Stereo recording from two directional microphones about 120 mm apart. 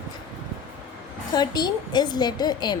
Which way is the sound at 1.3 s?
35° left (ahead or behind).